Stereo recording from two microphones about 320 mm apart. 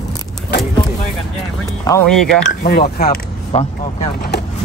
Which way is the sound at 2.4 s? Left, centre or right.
Left.